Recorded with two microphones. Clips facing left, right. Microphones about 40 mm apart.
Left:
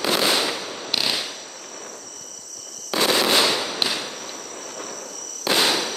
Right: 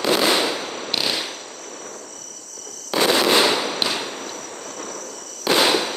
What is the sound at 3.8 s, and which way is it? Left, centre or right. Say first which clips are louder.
Fireworks: right 1 dB; centre.